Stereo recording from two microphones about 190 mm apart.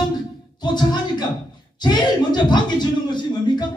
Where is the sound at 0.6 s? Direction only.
20° left (ahead or behind).